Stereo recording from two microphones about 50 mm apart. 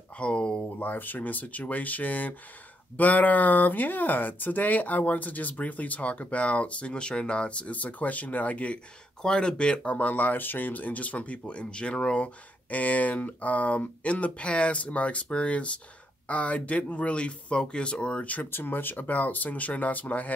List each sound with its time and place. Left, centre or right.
0.2 s speech: left
0.7 s speech: left
9.2 s speech: centre
12.7 s speech: left
18.5 s speech: left